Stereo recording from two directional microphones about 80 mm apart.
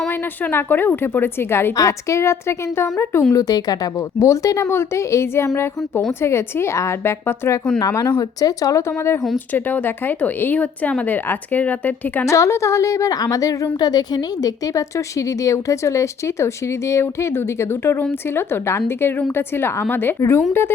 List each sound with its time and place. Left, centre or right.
0.1 s speech: left
1.7 s a woman's voice: left
3.3 s speech: left
4.2 s a woman's voice: left
7.8 s speech: left
9.5 s speech: left
12.2 s a woman's voice: left
13.7 s a woman's voice: left